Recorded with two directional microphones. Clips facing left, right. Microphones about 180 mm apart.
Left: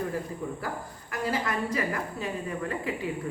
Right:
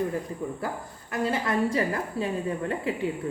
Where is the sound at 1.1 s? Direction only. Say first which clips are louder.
Right 3 dB; 25° right (ahead or behind).